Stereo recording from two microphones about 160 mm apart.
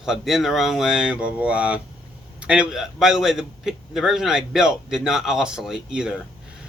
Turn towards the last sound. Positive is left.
turn(degrees=-5)  # may be behind; listen again after turning